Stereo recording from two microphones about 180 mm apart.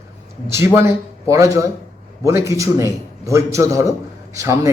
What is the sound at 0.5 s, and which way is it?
A man's voice, 15° right (ahead or behind).